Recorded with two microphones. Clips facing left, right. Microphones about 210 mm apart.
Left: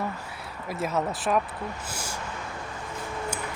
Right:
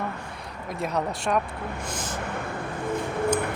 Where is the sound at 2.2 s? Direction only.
60° right (ahead or behind).